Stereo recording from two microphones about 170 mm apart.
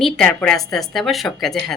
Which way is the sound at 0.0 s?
5° left (ahead or behind).